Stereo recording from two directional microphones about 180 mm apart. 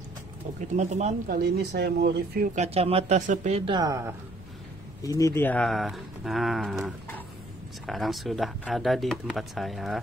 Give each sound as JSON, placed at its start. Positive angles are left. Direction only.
{"t": 0.7, "sound": "speech", "side_deg": -40}
{"t": 2.5, "sound": "speech", "side_deg": -35}
{"t": 3.7, "sound": "a woman's voice", "side_deg": -20}
{"t": 5.0, "sound": "speech", "side_deg": 20}